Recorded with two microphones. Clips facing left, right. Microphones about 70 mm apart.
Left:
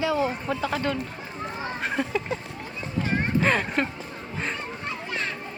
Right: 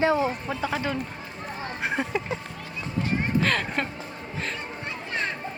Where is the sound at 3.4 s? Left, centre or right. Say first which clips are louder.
Left 2 dB; centre.